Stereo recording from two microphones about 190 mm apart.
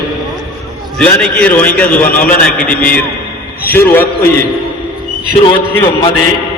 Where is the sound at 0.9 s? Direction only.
5° left (ahead or behind).